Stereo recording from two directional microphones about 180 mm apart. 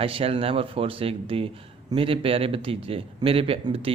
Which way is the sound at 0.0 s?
30° right (ahead or behind).